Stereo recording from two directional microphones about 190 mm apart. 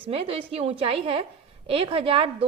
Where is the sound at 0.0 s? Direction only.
30° right (ahead or behind).